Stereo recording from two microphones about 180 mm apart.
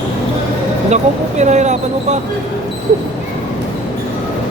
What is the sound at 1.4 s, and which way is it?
Speech, 40° right (ahead or behind).